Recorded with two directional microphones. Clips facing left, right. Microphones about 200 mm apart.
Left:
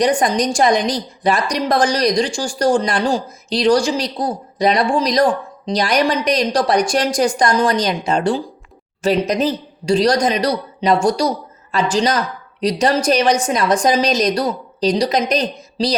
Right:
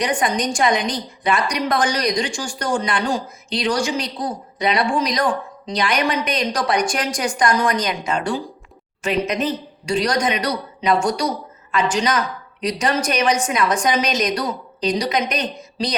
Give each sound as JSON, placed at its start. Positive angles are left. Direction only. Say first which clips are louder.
{"t": 0.0, "sound": "a woman's voice", "louder": "left 5 dB", "side_deg": 35}